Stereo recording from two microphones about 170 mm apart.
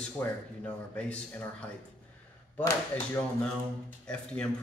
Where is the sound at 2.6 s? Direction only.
10° left (ahead or behind).